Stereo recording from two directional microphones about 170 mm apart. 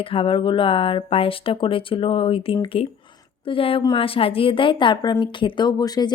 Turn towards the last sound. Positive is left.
turn(degrees=25)  # may be behind; listen again after turning